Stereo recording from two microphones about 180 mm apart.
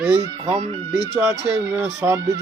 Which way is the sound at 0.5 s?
30° right (ahead or behind).